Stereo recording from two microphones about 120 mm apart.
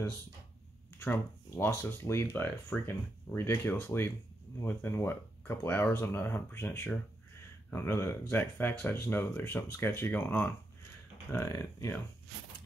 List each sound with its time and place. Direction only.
0.9 s speech: 20° left (ahead or behind)
11.3 s speech: 25° left (ahead or behind)